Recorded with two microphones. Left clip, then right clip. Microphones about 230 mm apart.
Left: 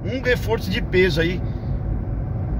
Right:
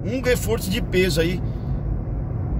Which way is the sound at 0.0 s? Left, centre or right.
Centre.